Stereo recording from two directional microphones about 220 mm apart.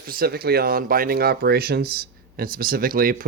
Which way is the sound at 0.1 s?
45° right (ahead or behind).